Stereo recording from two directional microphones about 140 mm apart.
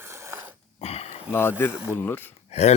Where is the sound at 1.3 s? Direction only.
15° left (ahead or behind).